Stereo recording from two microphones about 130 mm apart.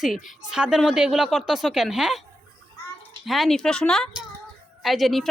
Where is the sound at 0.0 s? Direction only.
5° right (ahead or behind).